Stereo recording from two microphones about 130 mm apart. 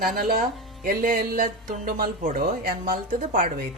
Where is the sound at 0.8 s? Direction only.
90° right.